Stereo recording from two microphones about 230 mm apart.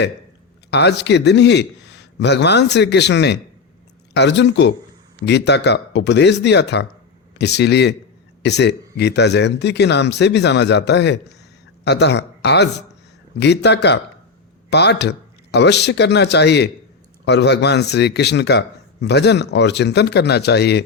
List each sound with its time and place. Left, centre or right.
0.7 s speech: left